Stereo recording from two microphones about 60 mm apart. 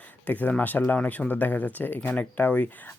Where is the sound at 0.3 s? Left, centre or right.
Left.